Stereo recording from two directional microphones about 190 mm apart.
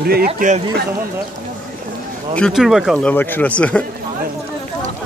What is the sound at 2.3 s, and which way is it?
Speech, centre (ahead or behind).